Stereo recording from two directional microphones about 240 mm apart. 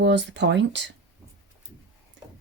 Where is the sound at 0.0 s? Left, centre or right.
Right.